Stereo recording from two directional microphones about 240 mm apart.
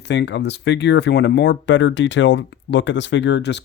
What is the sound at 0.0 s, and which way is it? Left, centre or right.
Speech, left.